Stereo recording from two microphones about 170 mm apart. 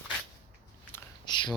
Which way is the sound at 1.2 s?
25° left (ahead or behind).